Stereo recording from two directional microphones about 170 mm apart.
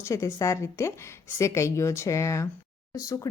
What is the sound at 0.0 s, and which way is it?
Speech, 15° left (ahead or behind).